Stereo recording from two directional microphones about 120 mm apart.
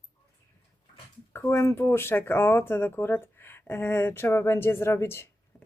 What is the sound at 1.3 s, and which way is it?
Speech, 20° left (ahead or behind).